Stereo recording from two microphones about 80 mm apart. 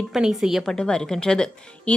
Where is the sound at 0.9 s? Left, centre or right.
Centre.